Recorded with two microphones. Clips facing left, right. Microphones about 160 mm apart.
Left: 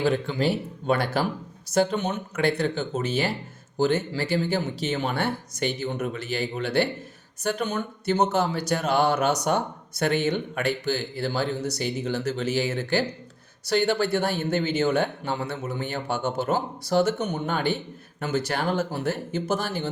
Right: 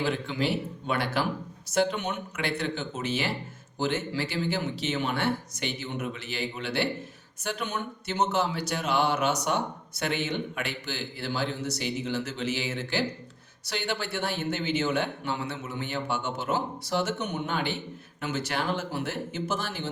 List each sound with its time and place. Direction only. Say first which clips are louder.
0.0 s a man's voice: left 5 dB; 40° left (ahead or behind)